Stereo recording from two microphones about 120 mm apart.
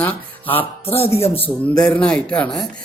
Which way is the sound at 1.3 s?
10° left (ahead or behind).